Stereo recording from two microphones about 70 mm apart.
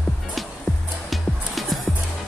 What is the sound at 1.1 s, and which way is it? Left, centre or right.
Music, centre.